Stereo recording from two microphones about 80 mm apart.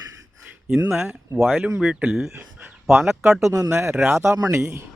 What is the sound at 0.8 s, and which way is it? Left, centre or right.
Speech, right.